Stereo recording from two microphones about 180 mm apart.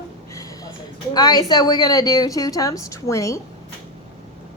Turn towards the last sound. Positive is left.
turn(degrees=15)  # may be behind; listen again after turning